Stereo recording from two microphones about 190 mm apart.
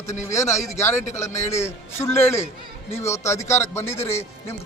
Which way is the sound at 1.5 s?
15° left (ahead or behind).